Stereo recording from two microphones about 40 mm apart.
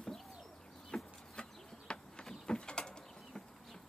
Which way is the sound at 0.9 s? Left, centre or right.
Left.